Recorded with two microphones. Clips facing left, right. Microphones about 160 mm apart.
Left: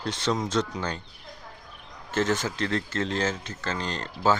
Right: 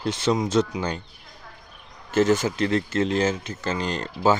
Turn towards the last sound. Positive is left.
turn(degrees=-15)  # may be behind; listen again after turning